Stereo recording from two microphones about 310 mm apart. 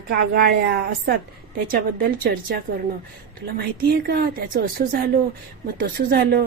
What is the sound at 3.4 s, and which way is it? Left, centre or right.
Speech, right.